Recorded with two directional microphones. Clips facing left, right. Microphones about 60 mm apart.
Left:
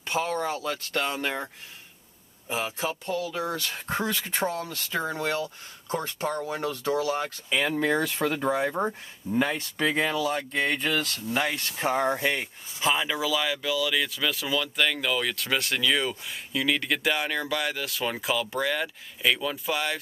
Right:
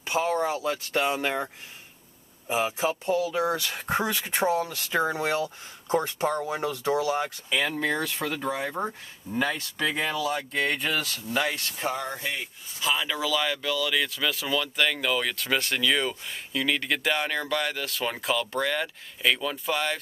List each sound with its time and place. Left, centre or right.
0.0 s speech: centre
7.4 s speech: centre
7.8 s speech: left; by 11.3 s centre
11.8 s speech: left
12.1 s speech: left
13.0 s speech: centre